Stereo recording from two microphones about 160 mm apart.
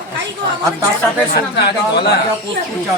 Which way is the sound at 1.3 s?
85° left.